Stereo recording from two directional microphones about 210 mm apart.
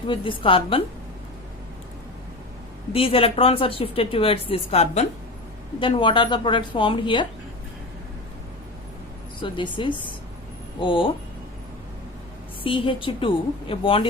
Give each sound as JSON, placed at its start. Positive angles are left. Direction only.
{"t": 0.1, "sound": "a woman's voice", "side_deg": 25}
{"t": 2.9, "sound": "a woman's voice", "side_deg": 25}
{"t": 9.4, "sound": "a woman's voice", "side_deg": 25}
{"t": 12.6, "sound": "a woman's voice", "side_deg": 25}